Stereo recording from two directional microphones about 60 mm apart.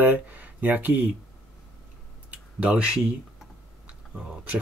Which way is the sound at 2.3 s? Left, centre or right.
Right.